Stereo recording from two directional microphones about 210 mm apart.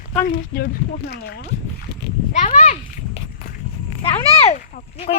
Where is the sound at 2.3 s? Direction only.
35° left (ahead or behind).